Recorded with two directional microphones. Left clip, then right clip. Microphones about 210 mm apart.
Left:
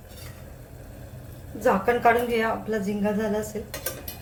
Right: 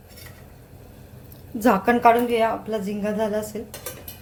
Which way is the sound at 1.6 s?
45° right (ahead or behind).